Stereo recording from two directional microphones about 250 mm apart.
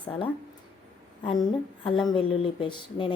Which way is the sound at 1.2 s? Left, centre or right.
Centre.